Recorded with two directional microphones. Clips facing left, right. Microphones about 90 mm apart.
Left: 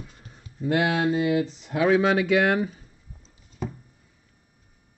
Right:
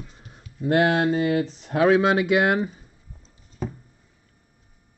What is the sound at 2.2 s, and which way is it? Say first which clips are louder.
Speech: right 1 dB; 15° right (ahead or behind).